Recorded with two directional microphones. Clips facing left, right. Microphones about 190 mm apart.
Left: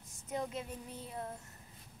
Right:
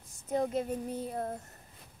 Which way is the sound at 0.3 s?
40° right (ahead or behind).